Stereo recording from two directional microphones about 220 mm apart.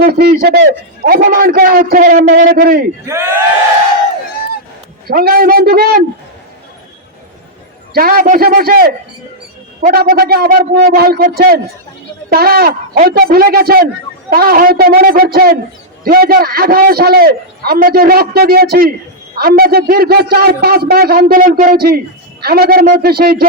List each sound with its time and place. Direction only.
0.0 s a man's voice: 45° right (ahead or behind)
3.1 s speech: 10° right (ahead or behind)
5.0 s a man's voice: 45° right (ahead or behind)
7.9 s a man's voice: 40° right (ahead or behind)